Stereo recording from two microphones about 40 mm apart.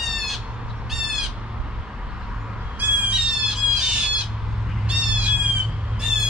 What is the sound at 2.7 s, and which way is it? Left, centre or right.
Squawk, right.